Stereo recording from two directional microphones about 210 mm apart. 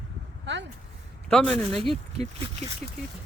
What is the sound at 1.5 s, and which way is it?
Speech, 30° right (ahead or behind).